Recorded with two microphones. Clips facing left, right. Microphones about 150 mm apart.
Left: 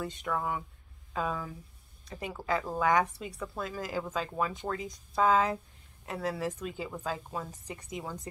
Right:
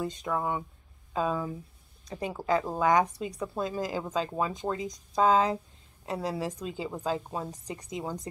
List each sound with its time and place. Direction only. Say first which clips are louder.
0.0 s a woman's voice: right 3 dB; 20° right (ahead or behind)